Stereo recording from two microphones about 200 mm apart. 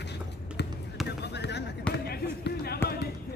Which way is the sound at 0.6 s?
60° left (ahead or behind).